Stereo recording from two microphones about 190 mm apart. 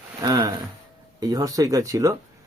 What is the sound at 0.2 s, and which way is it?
Speech, 15° right (ahead or behind).